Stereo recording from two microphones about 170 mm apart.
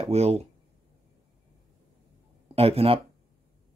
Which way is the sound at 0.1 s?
40° right (ahead or behind).